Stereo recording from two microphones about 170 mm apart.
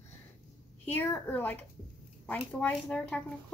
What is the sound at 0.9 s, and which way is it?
Speech, 10° left (ahead or behind).